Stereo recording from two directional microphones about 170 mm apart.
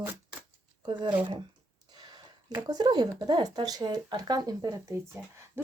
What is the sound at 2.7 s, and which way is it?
Speech, 25° right (ahead or behind).